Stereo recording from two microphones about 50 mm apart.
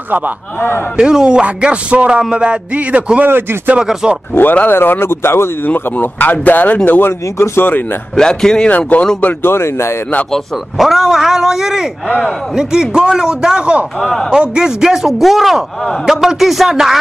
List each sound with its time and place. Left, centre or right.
0.9 s speech: centre
3.3 s speech: right
3.8 s a man's voice: centre
4.6 s speech: left
5.7 s speech: left
7.1 s speech: left
8.2 s speech: centre
8.6 s speech: left
9.4 s speech: left
10.8 s a sound: centre
12.2 s a man's voice: centre